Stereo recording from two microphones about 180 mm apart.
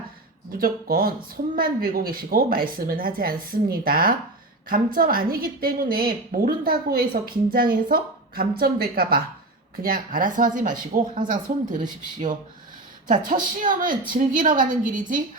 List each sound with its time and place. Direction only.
0.6 s a woman's voice: 55° right (ahead or behind)